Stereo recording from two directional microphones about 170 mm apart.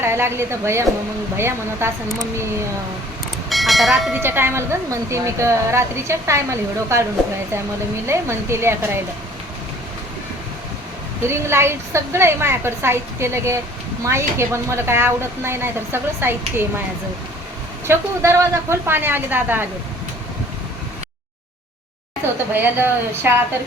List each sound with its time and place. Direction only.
0.0 s speech: 15° right (ahead or behind)
3.5 s train: centre (ahead or behind)
4.2 s speech: 15° right (ahead or behind)
8.0 s speech: 15° right (ahead or behind)
11.3 s speech: 15° right (ahead or behind)
17.8 s speech: 15° right (ahead or behind)
22.5 s speech: 10° right (ahead or behind)